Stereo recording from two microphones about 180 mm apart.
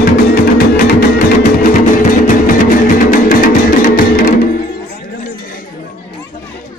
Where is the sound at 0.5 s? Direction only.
60° left (ahead or behind).